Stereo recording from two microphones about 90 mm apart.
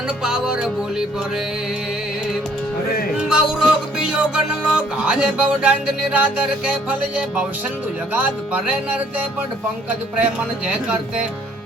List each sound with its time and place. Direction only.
0.2 s music: 10° right (ahead or behind)
3.2 s music: 10° right (ahead or behind)
8.1 s music: 20° right (ahead or behind)
10.7 s music: 10° right (ahead or behind)